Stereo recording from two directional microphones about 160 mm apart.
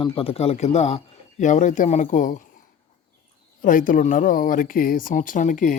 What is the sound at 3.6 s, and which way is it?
Speech, 55° left (ahead or behind).